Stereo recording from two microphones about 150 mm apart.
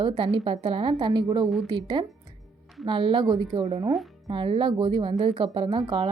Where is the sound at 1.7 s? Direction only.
30° right (ahead or behind).